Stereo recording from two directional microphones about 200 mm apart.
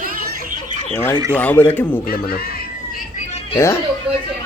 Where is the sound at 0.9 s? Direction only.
10° left (ahead or behind).